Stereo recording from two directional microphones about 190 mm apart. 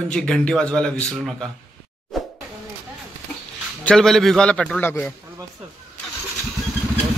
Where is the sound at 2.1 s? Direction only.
Centre (ahead or behind).